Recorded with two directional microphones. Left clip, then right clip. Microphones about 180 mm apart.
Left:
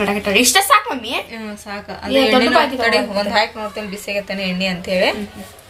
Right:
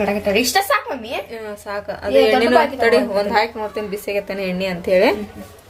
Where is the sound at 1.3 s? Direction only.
65° right (ahead or behind).